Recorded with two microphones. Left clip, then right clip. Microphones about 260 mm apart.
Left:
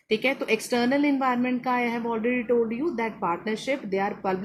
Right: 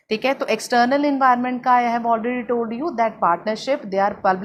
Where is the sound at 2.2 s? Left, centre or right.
Right.